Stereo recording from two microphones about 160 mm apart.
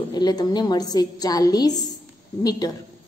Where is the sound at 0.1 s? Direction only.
25° left (ahead or behind).